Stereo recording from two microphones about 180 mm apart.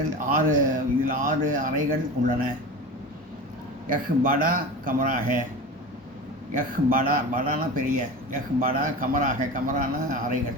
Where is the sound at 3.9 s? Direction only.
50° right (ahead or behind).